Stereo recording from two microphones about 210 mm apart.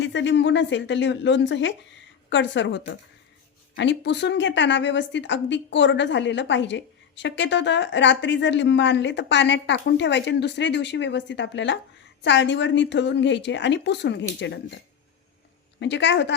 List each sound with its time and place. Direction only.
0.0 s a woman's voice: 60° left (ahead or behind)
15.8 s a woman's voice: 60° left (ahead or behind)